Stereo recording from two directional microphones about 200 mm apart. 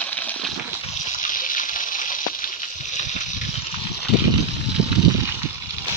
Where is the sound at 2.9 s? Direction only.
35° left (ahead or behind).